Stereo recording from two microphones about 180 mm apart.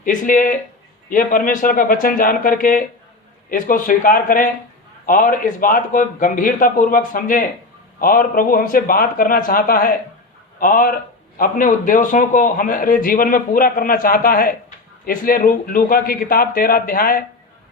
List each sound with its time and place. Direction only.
0.0 s a man's voice: 50° left (ahead or behind)